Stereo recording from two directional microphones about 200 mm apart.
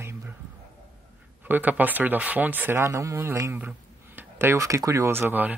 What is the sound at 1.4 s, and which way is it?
Speech, 10° right (ahead or behind).